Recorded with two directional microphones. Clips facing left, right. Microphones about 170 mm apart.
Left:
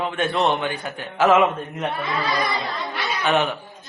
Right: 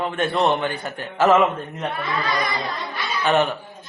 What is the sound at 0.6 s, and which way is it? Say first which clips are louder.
Speech: right 1 dB; 15° left (ahead or behind).